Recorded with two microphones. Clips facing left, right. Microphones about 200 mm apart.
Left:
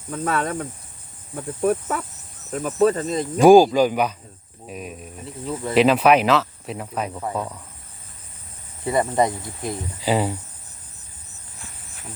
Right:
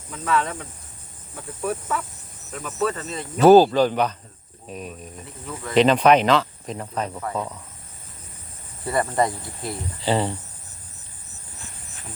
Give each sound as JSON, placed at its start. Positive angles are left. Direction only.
{"t": 0.1, "sound": "cricket", "side_deg": 50}
{"t": 2.5, "sound": "speech", "side_deg": 35}
{"t": 3.4, "sound": "speech", "side_deg": 10}
{"t": 8.8, "sound": "speech", "side_deg": 20}